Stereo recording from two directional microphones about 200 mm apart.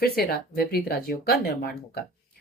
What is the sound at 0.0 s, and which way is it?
Speech, 50° left (ahead or behind).